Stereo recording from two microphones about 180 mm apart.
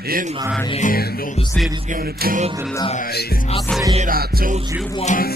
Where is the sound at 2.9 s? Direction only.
60° left (ahead or behind).